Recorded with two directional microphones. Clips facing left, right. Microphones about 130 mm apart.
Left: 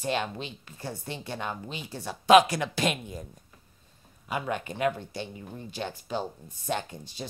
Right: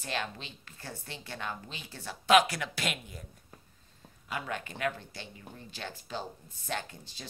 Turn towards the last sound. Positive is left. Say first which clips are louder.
# left 5 dB
turn(degrees=15)  # may be behind; listen again after turning